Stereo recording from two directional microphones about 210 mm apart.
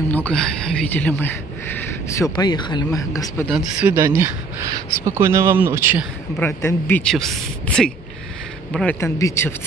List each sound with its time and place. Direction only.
0.1 s speech: 5° left (ahead or behind)
3.4 s speech: 5° right (ahead or behind)
6.4 s speech: 10° left (ahead or behind)